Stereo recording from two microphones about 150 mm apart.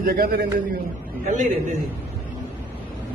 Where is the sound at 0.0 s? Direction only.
80° right.